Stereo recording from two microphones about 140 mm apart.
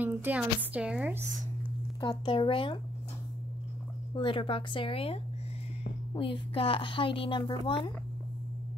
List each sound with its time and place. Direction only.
0.0 s a woman's voice: 15° right (ahead or behind)
2.0 s a woman's voice: 35° left (ahead or behind)
4.1 s a woman's voice: 35° left (ahead or behind)